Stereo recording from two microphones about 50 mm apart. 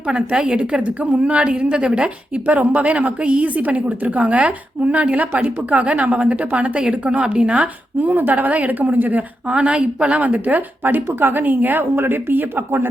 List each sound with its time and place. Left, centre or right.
0.0 s a woman's voice: right
8.0 s a woman's voice: right
9.5 s a woman's voice: right
11.1 s a woman's voice: right